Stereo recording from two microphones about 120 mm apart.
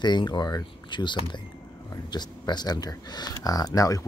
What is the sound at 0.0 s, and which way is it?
Speech, 40° left (ahead or behind).